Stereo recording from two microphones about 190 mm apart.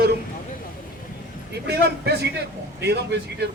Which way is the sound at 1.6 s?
60° right (ahead or behind).